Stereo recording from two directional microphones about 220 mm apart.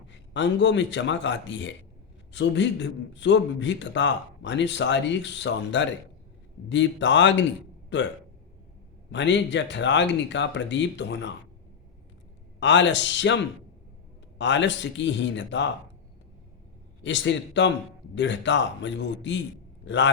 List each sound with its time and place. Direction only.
0.3 s a man's voice: 55° left (ahead or behind)
9.1 s a man's voice: 55° left (ahead or behind)
12.5 s a man's voice: 55° left (ahead or behind)
17.0 s a man's voice: 55° left (ahead or behind)